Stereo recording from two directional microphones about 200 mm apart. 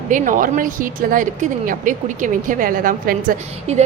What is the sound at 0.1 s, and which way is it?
Speech, 40° right (ahead or behind).